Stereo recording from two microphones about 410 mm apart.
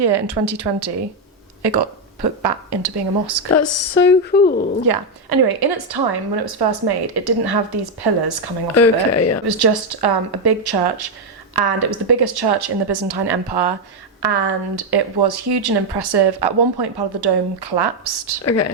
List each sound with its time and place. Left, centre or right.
0.0 s a woman's voice: right
3.5 s speech: left
4.9 s a woman's voice: right
8.7 s speech: left
9.5 s a woman's voice: right
18.4 s speech: left